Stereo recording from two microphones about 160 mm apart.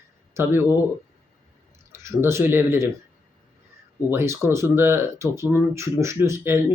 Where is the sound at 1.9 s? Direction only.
15° right (ahead or behind).